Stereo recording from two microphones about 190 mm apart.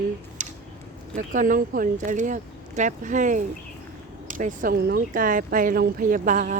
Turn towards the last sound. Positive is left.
turn(degrees=-40)  # may be behind; listen again after turning